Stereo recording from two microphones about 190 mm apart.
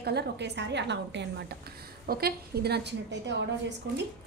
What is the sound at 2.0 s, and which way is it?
A woman's voice, 55° right (ahead or behind).